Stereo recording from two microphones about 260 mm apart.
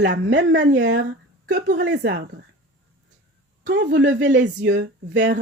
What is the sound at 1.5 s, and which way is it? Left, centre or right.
Speech, right.